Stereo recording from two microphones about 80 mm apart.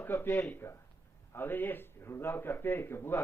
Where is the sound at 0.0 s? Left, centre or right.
Left.